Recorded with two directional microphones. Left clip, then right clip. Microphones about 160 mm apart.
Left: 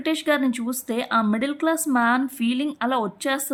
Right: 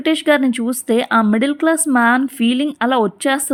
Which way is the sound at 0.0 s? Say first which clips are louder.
Right 7 dB; 35° right (ahead or behind).